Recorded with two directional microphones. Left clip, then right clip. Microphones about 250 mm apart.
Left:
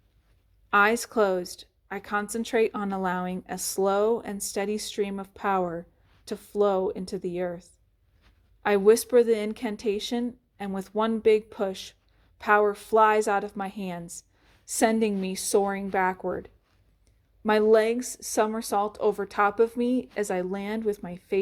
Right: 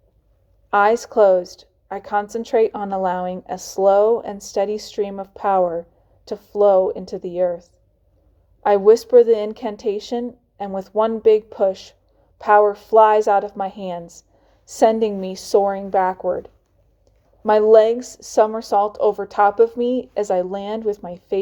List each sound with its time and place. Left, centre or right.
0.7 s a woman's voice: left